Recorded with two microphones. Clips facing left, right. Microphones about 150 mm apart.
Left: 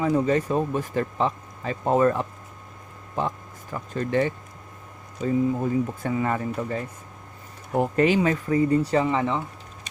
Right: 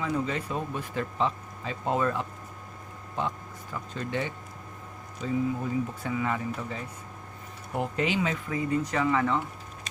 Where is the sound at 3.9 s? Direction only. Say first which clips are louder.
Left 9 dB; 45° left (ahead or behind).